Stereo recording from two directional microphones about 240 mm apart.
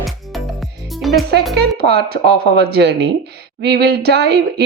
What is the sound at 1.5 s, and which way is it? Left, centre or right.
Speech, right.